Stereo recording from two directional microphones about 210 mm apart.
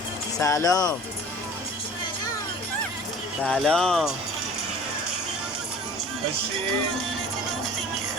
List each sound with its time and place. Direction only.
0.3 s speech: 15° left (ahead or behind)
3.4 s speech: 5° left (ahead or behind)